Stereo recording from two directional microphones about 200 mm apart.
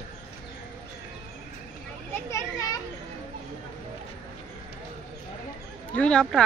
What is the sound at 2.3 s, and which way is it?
Children playing, 15° left (ahead or behind).